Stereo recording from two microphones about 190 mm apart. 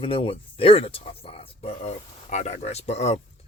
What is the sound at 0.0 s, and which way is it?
Speech, 30° left (ahead or behind).